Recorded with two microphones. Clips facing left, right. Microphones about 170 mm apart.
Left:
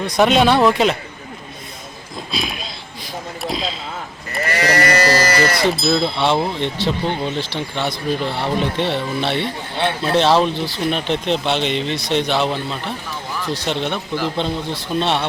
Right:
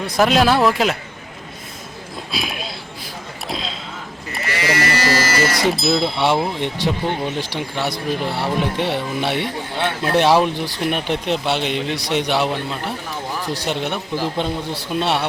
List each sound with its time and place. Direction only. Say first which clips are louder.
0.0 s speech: left 1 dB; centre (ahead or behind)
2.3 s a sound: even; 5° right (ahead or behind)
4.5 s electric shaver: left 3 dB; 45° left (ahead or behind)
5.7 s speech: left 1 dB; centre (ahead or behind)